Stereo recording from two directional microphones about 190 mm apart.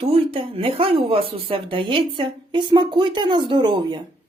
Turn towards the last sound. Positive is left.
turn(degrees=-25)  # may be behind; listen again after turning